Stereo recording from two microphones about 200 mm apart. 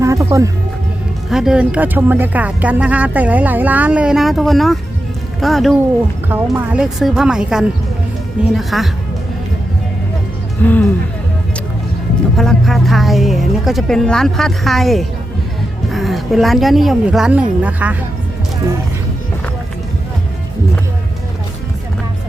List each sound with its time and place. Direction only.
0.0 s speech: 15° right (ahead or behind)
1.3 s a woman's voice: 5° right (ahead or behind)
6.2 s a woman's voice: 10° right (ahead or behind)
10.6 s speech: 10° left (ahead or behind)
12.4 s a woman's voice: centre (ahead or behind)